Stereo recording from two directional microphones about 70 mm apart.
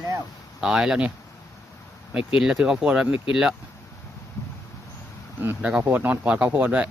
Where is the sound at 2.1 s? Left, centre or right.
Centre.